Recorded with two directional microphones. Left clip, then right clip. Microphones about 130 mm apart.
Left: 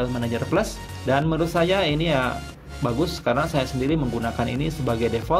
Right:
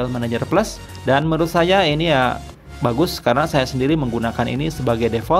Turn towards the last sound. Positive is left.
turn(degrees=-35)  # may be behind; listen again after turning